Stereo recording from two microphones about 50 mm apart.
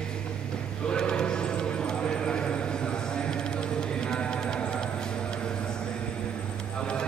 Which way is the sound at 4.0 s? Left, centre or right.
Centre.